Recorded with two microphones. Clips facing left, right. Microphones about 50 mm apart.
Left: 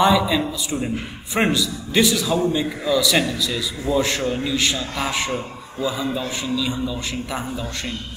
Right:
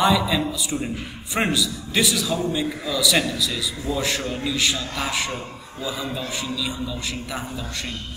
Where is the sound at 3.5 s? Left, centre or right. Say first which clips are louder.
Left 5 dB; centre.